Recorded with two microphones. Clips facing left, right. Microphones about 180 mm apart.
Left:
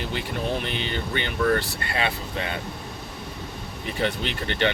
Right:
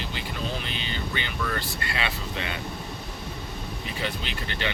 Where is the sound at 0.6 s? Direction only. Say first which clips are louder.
Left 4 dB; 60° left (ahead or behind).